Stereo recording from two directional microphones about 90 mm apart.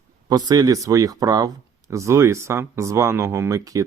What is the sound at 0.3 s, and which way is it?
Speech, 45° right (ahead or behind).